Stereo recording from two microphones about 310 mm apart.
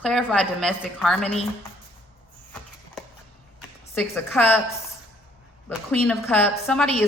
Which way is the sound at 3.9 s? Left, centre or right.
Centre.